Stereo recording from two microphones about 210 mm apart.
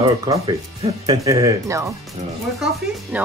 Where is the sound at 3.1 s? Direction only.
5° right (ahead or behind).